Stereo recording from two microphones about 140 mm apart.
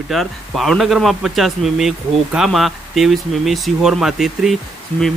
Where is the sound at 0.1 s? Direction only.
Centre (ahead or behind).